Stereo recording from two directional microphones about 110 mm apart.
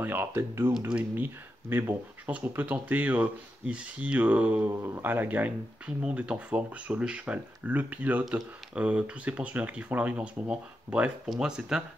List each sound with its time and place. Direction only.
0.0 s speech: 20° right (ahead or behind)